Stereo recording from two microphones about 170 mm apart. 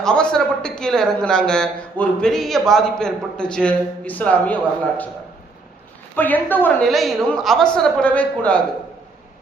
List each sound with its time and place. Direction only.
0.0 s speech: 5° left (ahead or behind)
6.1 s a woman's voice: 10° left (ahead or behind)